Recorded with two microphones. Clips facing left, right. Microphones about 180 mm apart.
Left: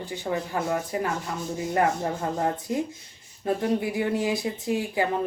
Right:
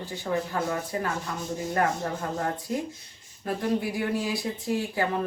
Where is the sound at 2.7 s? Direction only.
20° left (ahead or behind).